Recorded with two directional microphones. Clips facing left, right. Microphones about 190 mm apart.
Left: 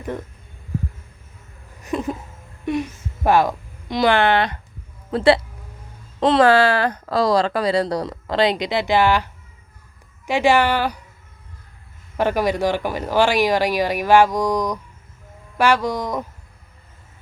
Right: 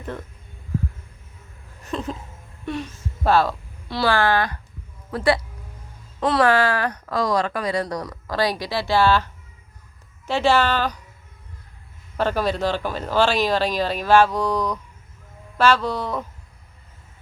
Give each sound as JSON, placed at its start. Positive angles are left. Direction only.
{"t": 1.8, "sound": "a sound", "side_deg": 15}
{"t": 2.6, "sound": "speech", "side_deg": 15}
{"t": 12.1, "sound": "speech", "side_deg": 15}